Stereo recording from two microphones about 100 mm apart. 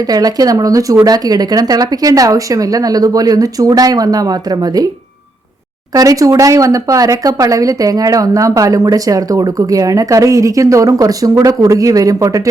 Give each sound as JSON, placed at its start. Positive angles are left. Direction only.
{"t": 0.1, "sound": "speech", "side_deg": -40}
{"t": 5.9, "sound": "speech", "side_deg": -35}